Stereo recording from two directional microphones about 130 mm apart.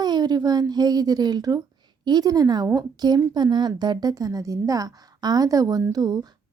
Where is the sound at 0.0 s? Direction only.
30° right (ahead or behind).